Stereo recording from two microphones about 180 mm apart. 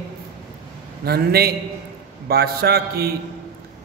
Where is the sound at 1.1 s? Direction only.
60° right (ahead or behind).